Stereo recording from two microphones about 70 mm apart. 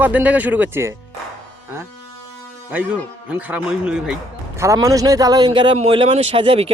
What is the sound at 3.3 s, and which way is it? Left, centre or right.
Speech, centre.